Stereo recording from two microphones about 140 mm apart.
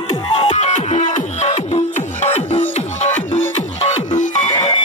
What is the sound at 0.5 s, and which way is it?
Music, 55° left (ahead or behind).